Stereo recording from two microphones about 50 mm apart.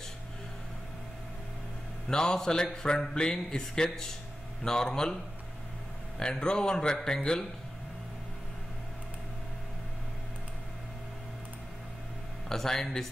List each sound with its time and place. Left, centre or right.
2.0 s speech: centre
12.4 s speech: centre